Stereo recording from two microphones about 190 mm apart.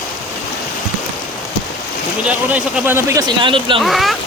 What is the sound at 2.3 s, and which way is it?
Speech, 5° right (ahead or behind).